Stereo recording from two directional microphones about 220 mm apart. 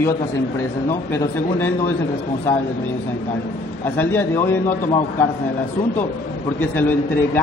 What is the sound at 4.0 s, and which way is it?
Speech, 10° left (ahead or behind).